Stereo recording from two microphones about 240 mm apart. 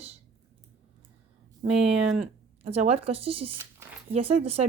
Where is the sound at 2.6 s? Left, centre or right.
Right.